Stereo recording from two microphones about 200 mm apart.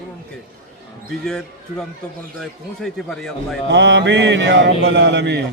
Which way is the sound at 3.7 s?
60° right (ahead or behind).